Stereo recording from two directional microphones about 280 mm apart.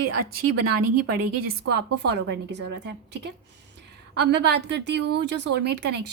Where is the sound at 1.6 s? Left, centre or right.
Right.